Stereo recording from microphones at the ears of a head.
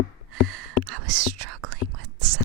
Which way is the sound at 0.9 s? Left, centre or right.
Right.